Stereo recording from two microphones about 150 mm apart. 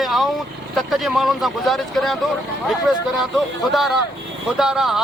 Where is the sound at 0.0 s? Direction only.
Centre (ahead or behind).